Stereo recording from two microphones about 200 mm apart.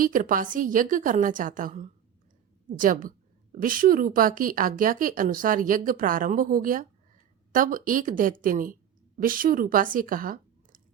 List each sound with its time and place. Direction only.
0.0 s a woman's voice: 45° right (ahead or behind)